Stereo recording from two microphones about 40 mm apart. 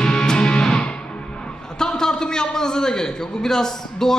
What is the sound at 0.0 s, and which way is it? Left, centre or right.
Music, centre.